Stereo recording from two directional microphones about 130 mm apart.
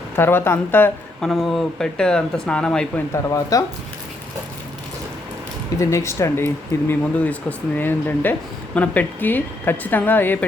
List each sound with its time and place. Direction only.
0.2 s speech: 15° left (ahead or behind)
1.2 s speech: centre (ahead or behind)
3.2 s speech: 25° left (ahead or behind)
5.8 s speech: 20° left (ahead or behind)